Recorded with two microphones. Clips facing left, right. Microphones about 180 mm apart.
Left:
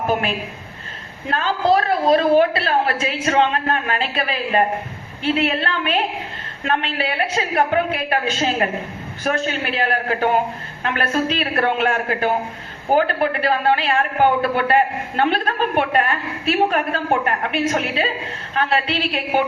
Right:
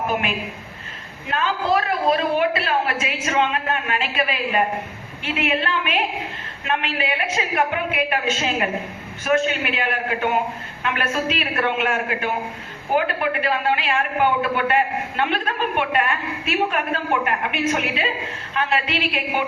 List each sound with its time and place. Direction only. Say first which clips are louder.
1.3 s a woman's voice: left 3 dB; 35° left (ahead or behind)